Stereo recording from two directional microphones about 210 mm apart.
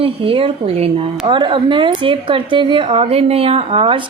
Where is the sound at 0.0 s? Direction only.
25° right (ahead or behind).